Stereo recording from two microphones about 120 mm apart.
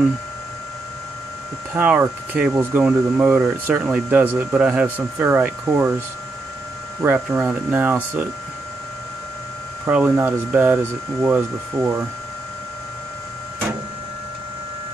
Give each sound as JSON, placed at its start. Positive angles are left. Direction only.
{"t": 1.7, "sound": "speech", "side_deg": -15}
{"t": 7.0, "sound": "speech", "side_deg": -20}
{"t": 9.8, "sound": "speech", "side_deg": -15}